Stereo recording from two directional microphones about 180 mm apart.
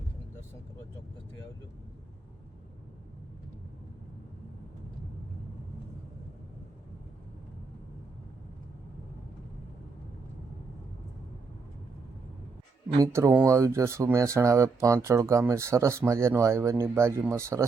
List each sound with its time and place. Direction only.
13.0 s speech: 20° right (ahead or behind)